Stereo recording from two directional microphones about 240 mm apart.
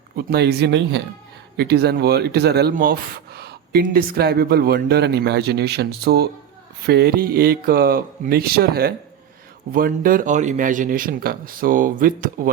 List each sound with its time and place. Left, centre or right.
0.2 s speech: right